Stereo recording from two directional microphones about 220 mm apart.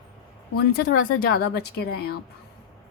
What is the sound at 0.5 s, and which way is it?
A woman's voice, 45° left (ahead or behind).